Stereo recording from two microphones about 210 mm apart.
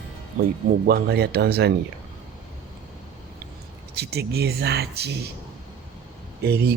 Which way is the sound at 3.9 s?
50° right (ahead or behind).